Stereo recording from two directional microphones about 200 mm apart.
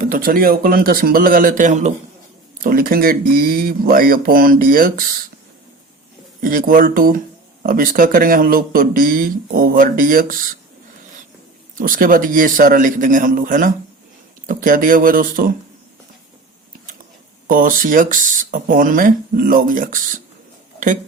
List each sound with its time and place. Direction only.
0.0 s speech: 45° right (ahead or behind)
6.4 s speech: 45° right (ahead or behind)
11.8 s speech: 45° right (ahead or behind)
17.5 s speech: 45° right (ahead or behind)